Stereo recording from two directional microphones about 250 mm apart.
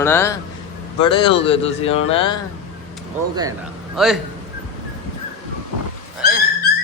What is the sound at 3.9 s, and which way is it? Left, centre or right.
Speech, centre.